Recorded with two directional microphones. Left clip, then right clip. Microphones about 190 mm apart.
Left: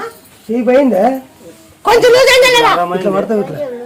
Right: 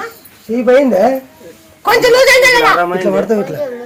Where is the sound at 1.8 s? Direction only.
50° left (ahead or behind).